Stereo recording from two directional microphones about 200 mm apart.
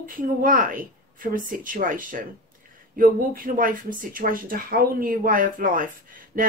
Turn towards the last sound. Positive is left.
turn(degrees=-45)  # may be behind; listen again after turning